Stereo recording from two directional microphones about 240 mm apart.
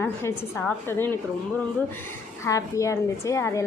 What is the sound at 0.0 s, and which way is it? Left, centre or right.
A woman's voice, centre.